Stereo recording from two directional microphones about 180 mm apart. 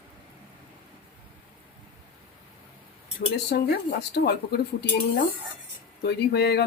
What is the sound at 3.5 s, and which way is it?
Speech, 65° left (ahead or behind).